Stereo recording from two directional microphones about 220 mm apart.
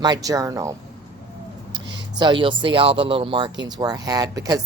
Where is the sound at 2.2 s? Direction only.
20° right (ahead or behind).